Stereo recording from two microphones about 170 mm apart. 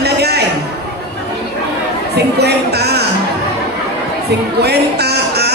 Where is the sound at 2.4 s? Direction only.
75° right (ahead or behind).